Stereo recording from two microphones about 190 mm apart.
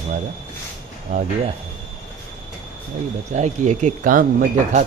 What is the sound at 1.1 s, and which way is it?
Speech, 45° right (ahead or behind).